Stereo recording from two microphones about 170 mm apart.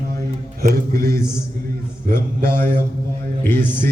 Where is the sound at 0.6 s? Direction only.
65° right (ahead or behind).